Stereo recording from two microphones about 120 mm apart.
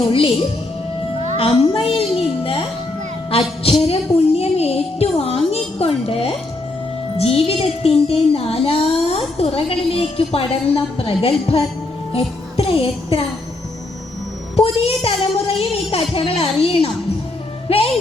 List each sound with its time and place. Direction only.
1.4 s a woman's voice: 50° left (ahead or behind)
3.2 s music: 50° left (ahead or behind)
7.2 s child singing: 55° left (ahead or behind)
9.4 s a woman's voice: 55° left (ahead or behind)
12.1 s music: 55° left (ahead or behind)
14.5 s a woman's voice: 55° left (ahead or behind)